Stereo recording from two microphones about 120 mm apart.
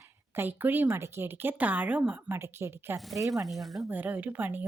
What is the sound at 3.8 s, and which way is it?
Speech, 15° right (ahead or behind).